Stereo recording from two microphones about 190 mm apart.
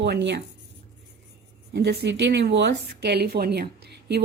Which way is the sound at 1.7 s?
60° right (ahead or behind).